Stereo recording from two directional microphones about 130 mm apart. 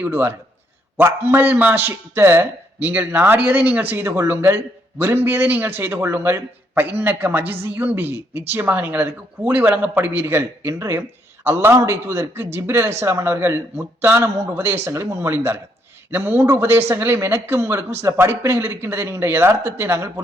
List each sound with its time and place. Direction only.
0.0 s a man's voice: 15° right (ahead or behind)